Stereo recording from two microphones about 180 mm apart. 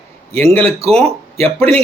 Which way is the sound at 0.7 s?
35° right (ahead or behind).